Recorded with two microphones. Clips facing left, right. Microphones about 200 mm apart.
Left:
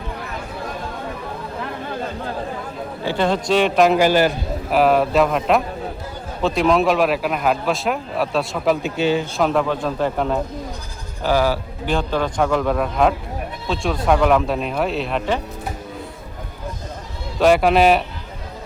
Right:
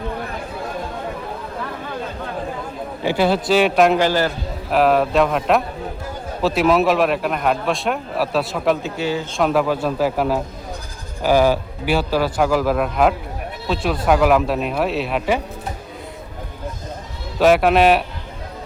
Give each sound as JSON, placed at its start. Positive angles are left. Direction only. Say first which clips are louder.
{"t": 3.0, "sound": "a man's voice", "louder": "right 2 dB", "side_deg": -10}
{"t": 4.0, "sound": "a man's voice", "louder": "left 3 dB", "side_deg": 15}
{"t": 4.7, "sound": "a man's voice", "louder": "even", "side_deg": 0}
{"t": 8.8, "sound": "speech", "louder": "left 3 dB", "side_deg": 20}
{"t": 9.4, "sound": "a man's voice", "louder": "right 5 dB", "side_deg": -5}
{"t": 17.4, "sound": "a man's voice", "louder": "even", "side_deg": 0}